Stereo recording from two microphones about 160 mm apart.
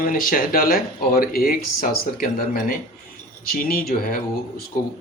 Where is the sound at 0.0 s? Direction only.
60° left (ahead or behind).